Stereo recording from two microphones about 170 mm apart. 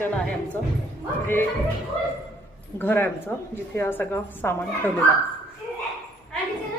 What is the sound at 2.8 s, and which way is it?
A woman's voice, 10° left (ahead or behind).